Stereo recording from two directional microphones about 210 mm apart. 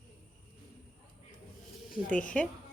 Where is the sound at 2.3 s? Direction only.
5° left (ahead or behind).